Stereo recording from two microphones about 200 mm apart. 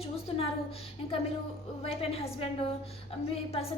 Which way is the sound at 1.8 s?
30° left (ahead or behind).